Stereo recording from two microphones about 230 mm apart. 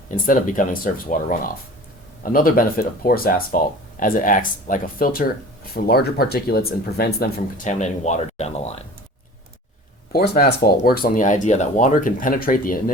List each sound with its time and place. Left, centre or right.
0.3 s speech: left
10.1 s speech: left